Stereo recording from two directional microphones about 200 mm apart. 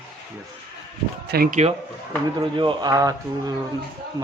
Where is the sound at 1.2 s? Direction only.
50° right (ahead or behind).